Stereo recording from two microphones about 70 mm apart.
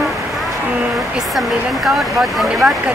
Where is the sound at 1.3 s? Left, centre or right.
Centre.